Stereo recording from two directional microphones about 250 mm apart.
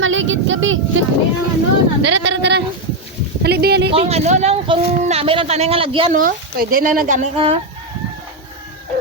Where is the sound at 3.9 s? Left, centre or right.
Right.